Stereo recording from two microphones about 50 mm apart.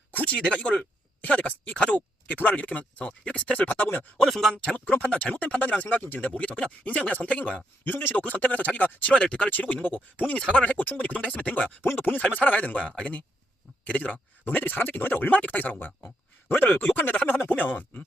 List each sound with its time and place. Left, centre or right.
0.3 s speech: centre
2.2 s speech: left
3.6 s speech: left
4.3 s speech: centre
4.9 s speech: left
9.5 s speech: left
11.8 s speech: left
12.2 s speech: left